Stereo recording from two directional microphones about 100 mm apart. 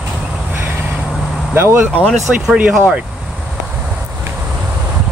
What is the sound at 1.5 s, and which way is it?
Speech, 25° right (ahead or behind).